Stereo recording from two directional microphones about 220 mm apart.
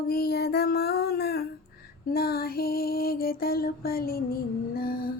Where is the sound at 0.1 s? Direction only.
45° left (ahead or behind).